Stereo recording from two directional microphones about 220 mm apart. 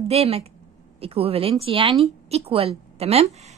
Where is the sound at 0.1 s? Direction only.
25° right (ahead or behind).